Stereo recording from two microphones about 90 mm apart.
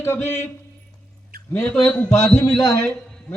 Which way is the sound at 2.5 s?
5° left (ahead or behind).